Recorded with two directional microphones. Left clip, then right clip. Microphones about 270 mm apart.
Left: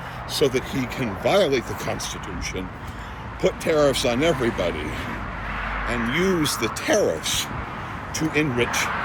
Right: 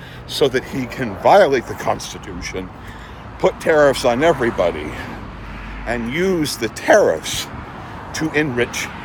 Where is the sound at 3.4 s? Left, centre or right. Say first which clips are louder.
Right 6 dB; centre.